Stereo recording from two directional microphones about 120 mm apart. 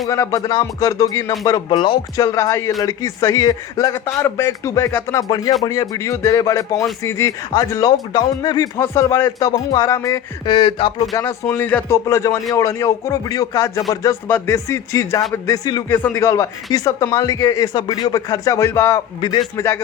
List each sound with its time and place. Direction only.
0.1 s speech: 25° left (ahead or behind)
5.3 s speech: 30° left (ahead or behind)
10.4 s speech: 45° left (ahead or behind)
11.1 s speech: 20° left (ahead or behind)
15.9 s speech: 20° left (ahead or behind)
19.2 s speech: 40° left (ahead or behind)
19.5 s speech: 20° left (ahead or behind)